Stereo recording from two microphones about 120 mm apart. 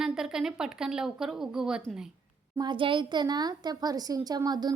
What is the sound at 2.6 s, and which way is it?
A woman's voice, 40° right (ahead or behind).